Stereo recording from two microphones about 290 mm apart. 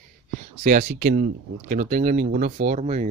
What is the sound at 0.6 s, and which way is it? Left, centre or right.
Speech, right.